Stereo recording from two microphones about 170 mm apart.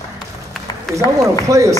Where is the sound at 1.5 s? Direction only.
20° right (ahead or behind).